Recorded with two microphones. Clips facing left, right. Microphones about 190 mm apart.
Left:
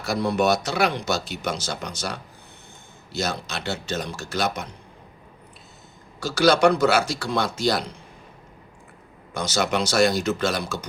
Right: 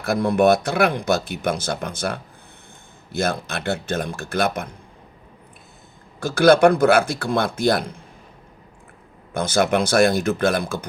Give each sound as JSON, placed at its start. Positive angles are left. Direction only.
{"t": 0.0, "sound": "speech", "side_deg": -55}
{"t": 6.1, "sound": "speech", "side_deg": -55}
{"t": 9.3, "sound": "speech", "side_deg": -55}